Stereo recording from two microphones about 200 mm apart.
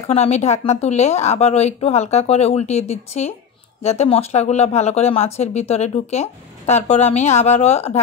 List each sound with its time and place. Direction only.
0.1 s speech: 30° left (ahead or behind)